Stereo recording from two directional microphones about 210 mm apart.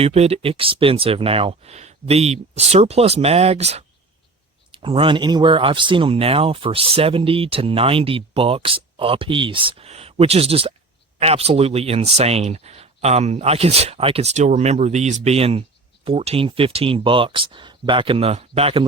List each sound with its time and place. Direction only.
0.0 s speech: 30° right (ahead or behind)